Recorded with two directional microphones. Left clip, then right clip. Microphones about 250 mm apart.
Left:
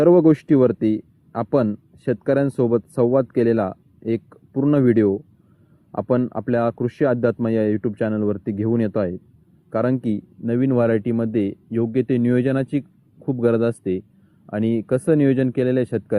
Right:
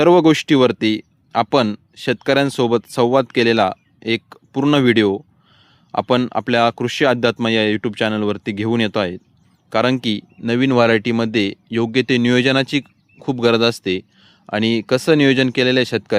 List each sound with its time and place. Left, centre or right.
0.0 s speech: right